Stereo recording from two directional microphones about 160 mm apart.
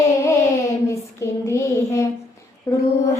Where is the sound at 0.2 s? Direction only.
20° left (ahead or behind).